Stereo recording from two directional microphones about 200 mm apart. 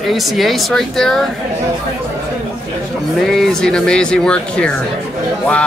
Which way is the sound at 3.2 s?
Centre (ahead or behind).